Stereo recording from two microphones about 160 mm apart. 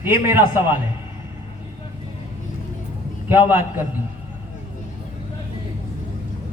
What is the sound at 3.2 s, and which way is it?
Speech, 10° right (ahead or behind).